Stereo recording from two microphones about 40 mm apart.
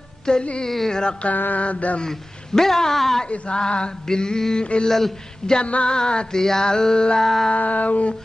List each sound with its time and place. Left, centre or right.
0.2 s speech: left
0.7 s speech: centre
1.3 s mantra: left
2.0 s speech: centre
3.3 s speech: left
5.6 s speech: left
7.5 s mantra: left